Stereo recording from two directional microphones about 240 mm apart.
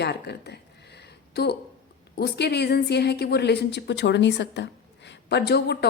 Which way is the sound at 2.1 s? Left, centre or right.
Left.